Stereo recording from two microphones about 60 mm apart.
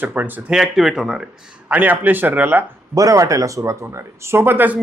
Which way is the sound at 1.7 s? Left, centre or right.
Right.